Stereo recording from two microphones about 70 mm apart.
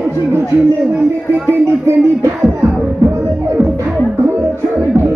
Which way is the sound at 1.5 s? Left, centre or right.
Right.